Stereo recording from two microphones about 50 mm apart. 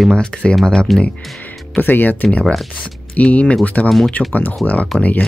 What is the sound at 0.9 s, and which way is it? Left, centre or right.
Speech, centre.